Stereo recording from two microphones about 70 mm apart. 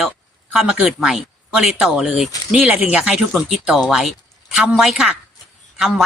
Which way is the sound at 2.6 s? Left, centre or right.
Centre.